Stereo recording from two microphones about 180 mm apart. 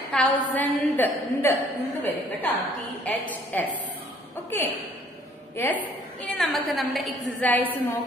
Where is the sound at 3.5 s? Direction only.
10° left (ahead or behind).